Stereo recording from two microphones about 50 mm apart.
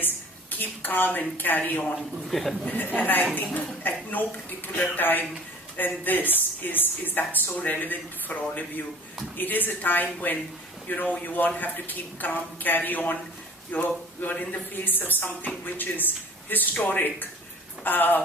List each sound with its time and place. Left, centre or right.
0.6 s speech: left
2.0 s a man's voice: centre
2.6 s speech: left